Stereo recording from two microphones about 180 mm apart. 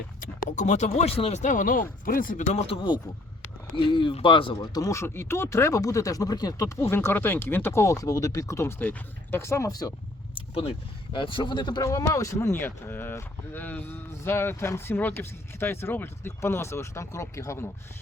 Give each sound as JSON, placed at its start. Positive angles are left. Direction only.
{"t": 0.2, "sound": "speech", "side_deg": 40}
{"t": 10.3, "sound": "speech", "side_deg": 35}